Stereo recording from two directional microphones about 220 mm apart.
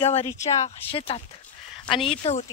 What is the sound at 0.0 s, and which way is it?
Speech, 30° left (ahead or behind).